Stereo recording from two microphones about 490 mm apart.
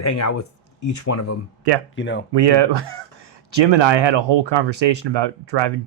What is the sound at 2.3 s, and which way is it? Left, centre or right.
Speech, right.